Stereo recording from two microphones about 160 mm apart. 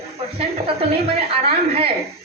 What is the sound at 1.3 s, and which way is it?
Speech, 40° right (ahead or behind).